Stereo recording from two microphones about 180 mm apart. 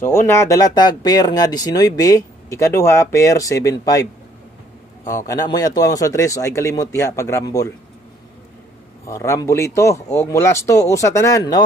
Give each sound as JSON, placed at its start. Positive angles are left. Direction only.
{"t": 0.5, "sound": "a man's voice", "side_deg": 20}
{"t": 9.0, "sound": "a man's voice", "side_deg": 15}